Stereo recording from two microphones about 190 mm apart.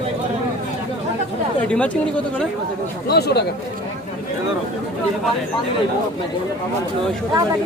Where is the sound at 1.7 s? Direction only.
5° left (ahead or behind).